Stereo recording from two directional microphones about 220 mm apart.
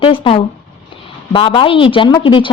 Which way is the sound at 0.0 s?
25° left (ahead or behind).